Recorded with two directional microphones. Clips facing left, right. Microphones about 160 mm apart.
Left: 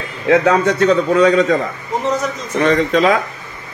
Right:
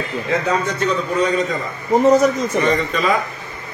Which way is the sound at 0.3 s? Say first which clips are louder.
Left 8 dB; 80° left.